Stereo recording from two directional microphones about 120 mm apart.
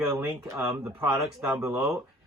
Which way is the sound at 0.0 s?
5° right (ahead or behind).